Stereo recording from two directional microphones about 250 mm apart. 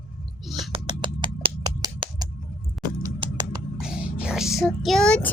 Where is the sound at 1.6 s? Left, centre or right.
Centre.